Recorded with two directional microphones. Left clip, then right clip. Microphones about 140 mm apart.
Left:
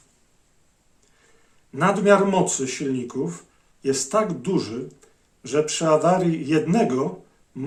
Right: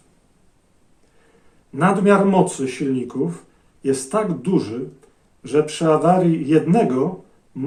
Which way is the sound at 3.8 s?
30° left (ahead or behind).